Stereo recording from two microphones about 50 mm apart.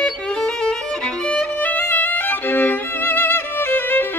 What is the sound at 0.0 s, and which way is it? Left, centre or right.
Violin, centre.